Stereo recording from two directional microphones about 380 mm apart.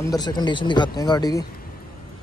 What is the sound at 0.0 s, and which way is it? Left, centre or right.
Speech, centre.